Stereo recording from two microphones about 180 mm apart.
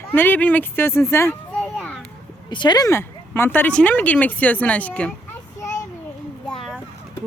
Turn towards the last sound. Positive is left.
turn(degrees=0)  # may be behind; listen again after turning